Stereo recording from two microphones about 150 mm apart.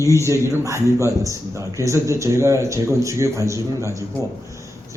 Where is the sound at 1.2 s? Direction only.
20° right (ahead or behind).